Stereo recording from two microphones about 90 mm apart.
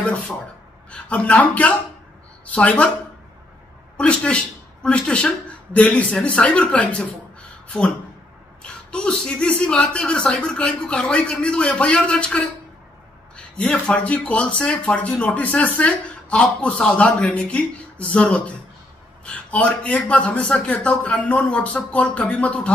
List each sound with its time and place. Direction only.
0.0 s speech: 15° left (ahead or behind)
3.9 s speech: 10° left (ahead or behind)
8.6 s speech: 10° left (ahead or behind)
13.6 s speech: 10° left (ahead or behind)